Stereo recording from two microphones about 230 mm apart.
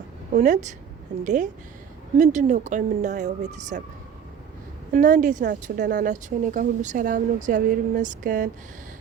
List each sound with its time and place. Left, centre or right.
0.3 s speech: right
4.9 s speech: right